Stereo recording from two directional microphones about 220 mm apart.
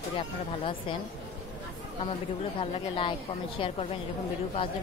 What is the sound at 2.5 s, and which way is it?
Speech, 25° left (ahead or behind).